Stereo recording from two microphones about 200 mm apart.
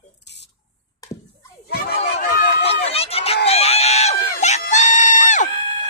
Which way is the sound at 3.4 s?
30° left (ahead or behind).